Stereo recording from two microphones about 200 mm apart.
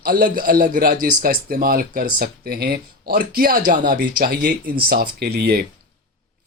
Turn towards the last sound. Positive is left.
turn(degrees=-50)  # may be behind; listen again after turning